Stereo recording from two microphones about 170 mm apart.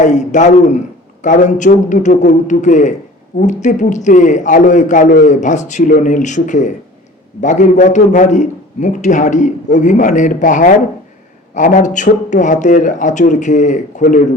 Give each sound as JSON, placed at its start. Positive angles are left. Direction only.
{"t": 0.0, "sound": "a man's voice", "side_deg": 45}